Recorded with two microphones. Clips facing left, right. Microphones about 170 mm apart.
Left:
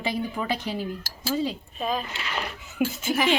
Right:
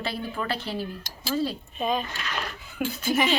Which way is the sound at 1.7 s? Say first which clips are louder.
Right 3 dB; centre (ahead or behind).